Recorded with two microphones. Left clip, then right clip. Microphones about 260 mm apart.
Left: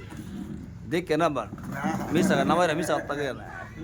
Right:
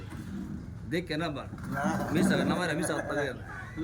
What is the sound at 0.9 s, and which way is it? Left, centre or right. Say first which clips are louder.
Speech: left 8 dB; centre.